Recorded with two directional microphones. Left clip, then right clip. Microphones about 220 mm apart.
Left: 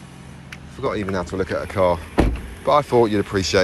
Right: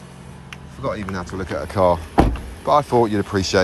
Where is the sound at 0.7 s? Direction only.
10° right (ahead or behind).